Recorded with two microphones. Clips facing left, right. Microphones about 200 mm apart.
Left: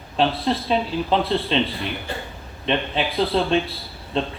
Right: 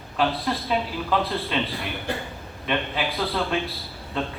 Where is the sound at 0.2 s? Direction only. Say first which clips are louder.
Left 3 dB; 25° left (ahead or behind).